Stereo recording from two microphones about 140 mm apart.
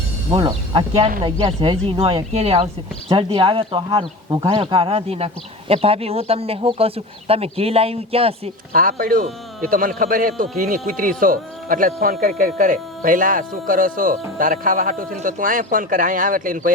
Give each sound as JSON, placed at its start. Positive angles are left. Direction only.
{"t": 0.3, "sound": "speech", "side_deg": -40}
{"t": 8.7, "sound": "speech", "side_deg": -85}